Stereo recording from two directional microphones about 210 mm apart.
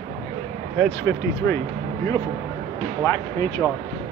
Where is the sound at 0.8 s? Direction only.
10° left (ahead or behind).